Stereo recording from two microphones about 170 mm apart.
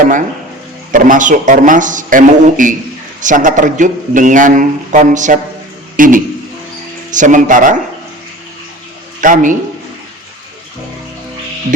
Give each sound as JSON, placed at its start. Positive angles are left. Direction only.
{"t": 0.9, "sound": "a man's voice", "side_deg": -50}
{"t": 9.2, "sound": "a man's voice", "side_deg": -50}